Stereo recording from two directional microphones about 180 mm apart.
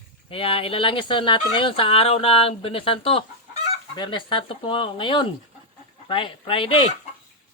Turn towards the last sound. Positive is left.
turn(degrees=30)  # may be behind; listen again after turning